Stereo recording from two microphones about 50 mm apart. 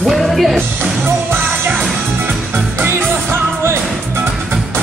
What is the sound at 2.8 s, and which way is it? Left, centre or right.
Music, right.